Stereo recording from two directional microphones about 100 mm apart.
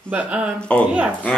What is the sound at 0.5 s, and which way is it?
Speech, 10° left (ahead or behind).